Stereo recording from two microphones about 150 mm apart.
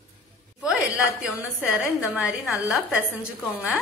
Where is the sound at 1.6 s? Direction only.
5° right (ahead or behind).